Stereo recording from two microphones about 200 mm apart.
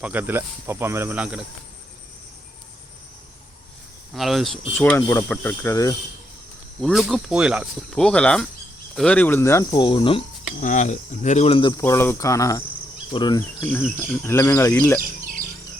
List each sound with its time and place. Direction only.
0.0 s speech: 10° right (ahead or behind)
4.1 s speech: centre (ahead or behind)
4.8 s speech: 10° left (ahead or behind)
6.8 s speech: centre (ahead or behind); by 10.2 s 25° left (ahead or behind)
10.6 s speech: 40° left (ahead or behind)
11.8 s speech: 15° left (ahead or behind)
13.6 s speech: 10° left (ahead or behind)